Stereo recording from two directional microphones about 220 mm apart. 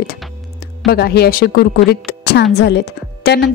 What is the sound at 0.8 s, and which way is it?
Speech, 45° left (ahead or behind).